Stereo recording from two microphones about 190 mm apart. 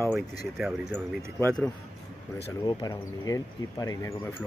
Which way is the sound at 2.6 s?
20° left (ahead or behind).